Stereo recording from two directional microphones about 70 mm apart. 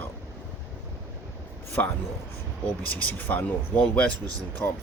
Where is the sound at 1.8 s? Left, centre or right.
Left.